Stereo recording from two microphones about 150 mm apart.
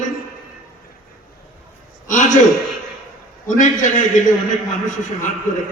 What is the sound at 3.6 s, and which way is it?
Speech, 55° left (ahead or behind).